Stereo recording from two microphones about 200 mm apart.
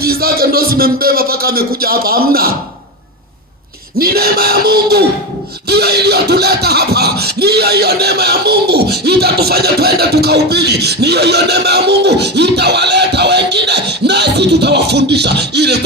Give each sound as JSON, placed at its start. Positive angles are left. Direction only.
{"t": 0.0, "sound": "a man's voice", "side_deg": -50}
{"t": 3.9, "sound": "a man's voice", "side_deg": -50}
{"t": 5.6, "sound": "a sound", "side_deg": -55}